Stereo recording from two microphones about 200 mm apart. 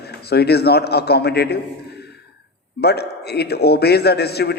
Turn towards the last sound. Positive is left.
turn(degrees=55)  # may be behind; listen again after turning